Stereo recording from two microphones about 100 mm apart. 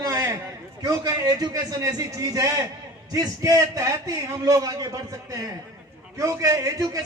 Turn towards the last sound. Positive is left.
turn(degrees=-35)  # may be behind; listen again after turning